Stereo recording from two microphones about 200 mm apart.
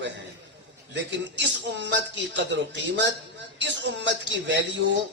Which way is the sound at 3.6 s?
60° right (ahead or behind).